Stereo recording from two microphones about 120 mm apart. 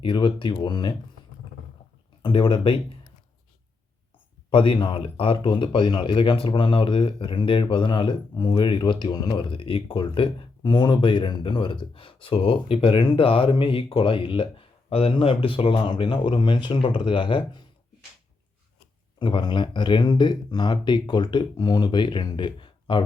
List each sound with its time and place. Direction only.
0.0 s speech: 45° left (ahead or behind)
2.2 s speech: 45° left (ahead or behind)
4.5 s speech: 45° left (ahead or behind)
19.2 s speech: 45° left (ahead or behind)